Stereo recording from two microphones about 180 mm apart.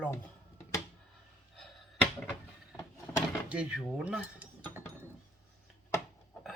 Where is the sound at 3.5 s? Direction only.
5° right (ahead or behind).